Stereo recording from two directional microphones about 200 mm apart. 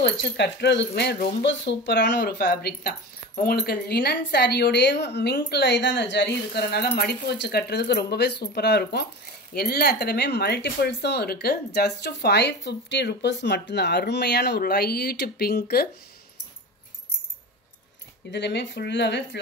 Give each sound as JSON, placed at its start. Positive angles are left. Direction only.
{"t": 0.0, "sound": "speech", "side_deg": 60}
{"t": 18.3, "sound": "speech", "side_deg": 60}